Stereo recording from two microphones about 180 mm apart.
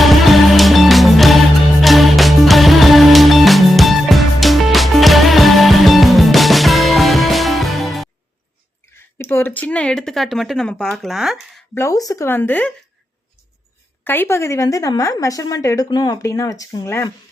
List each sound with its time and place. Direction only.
0.0 s music: centre (ahead or behind)
9.0 s speech: 15° left (ahead or behind)
11.7 s speech: 15° left (ahead or behind)
14.0 s a woman's voice: 10° left (ahead or behind)